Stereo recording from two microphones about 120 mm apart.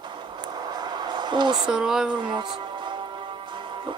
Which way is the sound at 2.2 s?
40° right (ahead or behind).